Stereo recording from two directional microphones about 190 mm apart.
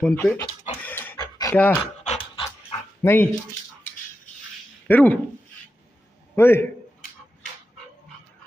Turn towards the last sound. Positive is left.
turn(degrees=10)  # may be behind; listen again after turning